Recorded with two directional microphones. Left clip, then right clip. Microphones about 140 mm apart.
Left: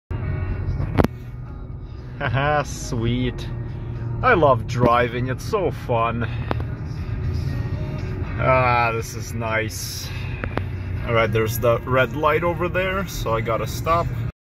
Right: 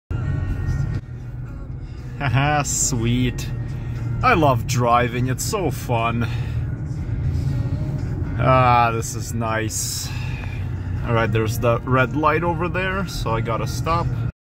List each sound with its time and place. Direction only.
2.1 s speech: 15° right (ahead or behind)
8.4 s speech: 15° right (ahead or behind)
11.1 s speech: 10° right (ahead or behind)